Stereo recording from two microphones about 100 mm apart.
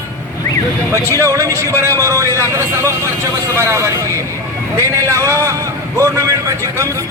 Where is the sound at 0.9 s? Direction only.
30° right (ahead or behind).